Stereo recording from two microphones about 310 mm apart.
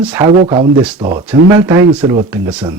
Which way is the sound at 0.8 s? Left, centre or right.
Centre.